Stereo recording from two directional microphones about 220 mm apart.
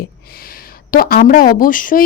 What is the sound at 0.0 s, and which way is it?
A woman's voice, 45° left (ahead or behind).